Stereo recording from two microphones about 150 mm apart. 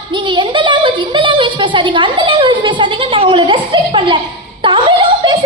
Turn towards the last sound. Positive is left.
turn(degrees=-30)  # may be behind; listen again after turning